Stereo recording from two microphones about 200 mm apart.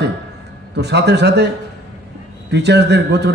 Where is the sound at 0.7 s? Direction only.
55° right (ahead or behind).